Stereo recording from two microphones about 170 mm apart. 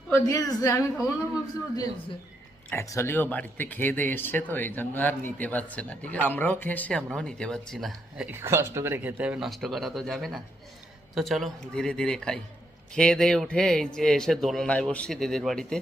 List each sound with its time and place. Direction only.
0.1 s a woman's voice: 20° left (ahead or behind)
2.6 s speech: 15° left (ahead or behind); by 8.3 s centre (ahead or behind)
8.3 s a man's voice: 15° right (ahead or behind); by 15.8 s 5° left (ahead or behind)